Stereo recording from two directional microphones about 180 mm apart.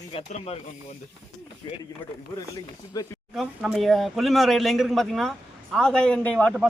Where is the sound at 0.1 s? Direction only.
35° left (ahead or behind).